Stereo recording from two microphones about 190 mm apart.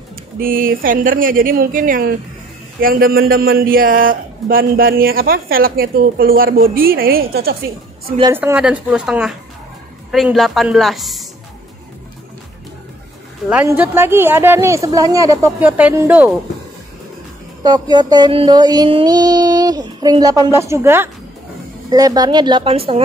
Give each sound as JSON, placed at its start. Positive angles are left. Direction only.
{"t": 0.4, "sound": "a man's voice", "side_deg": -50}
{"t": 8.2, "sound": "speech", "side_deg": -15}
{"t": 13.5, "sound": "speech", "side_deg": -10}
{"t": 17.6, "sound": "child singing", "side_deg": -20}